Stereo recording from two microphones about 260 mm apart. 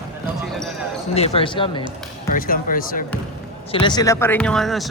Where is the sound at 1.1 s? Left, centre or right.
Left.